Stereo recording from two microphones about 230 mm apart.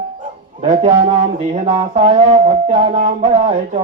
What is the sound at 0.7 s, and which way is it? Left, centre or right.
Music, right.